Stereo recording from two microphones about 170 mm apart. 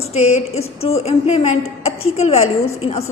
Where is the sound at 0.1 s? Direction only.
40° left (ahead or behind).